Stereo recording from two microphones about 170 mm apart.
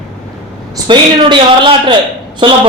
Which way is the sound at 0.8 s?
30° right (ahead or behind).